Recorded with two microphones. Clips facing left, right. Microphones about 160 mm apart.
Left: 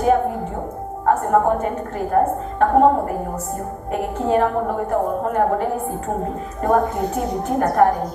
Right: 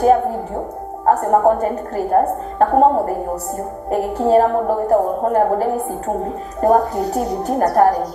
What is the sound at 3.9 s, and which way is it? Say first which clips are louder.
A woman's voice: right 5 dB; 35° right (ahead or behind).